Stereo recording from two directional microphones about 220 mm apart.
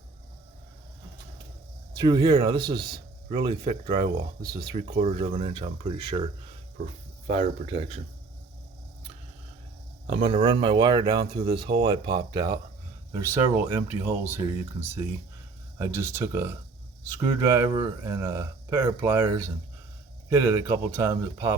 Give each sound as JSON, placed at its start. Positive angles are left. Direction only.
{"t": 2.0, "sound": "speech", "side_deg": -15}
{"t": 2.6, "sound": "speech", "side_deg": -45}
{"t": 3.2, "sound": "speech", "side_deg": -25}
{"t": 7.6, "sound": "speech", "side_deg": -25}
{"t": 10.1, "sound": "speech", "side_deg": -25}